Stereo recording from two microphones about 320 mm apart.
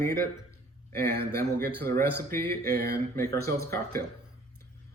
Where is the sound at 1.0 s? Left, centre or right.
Right.